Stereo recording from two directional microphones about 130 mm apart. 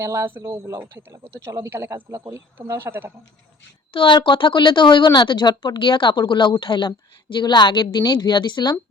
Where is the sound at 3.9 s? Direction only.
40° left (ahead or behind).